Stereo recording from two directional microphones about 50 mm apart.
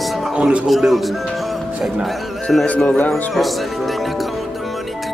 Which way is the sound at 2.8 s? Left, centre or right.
Left.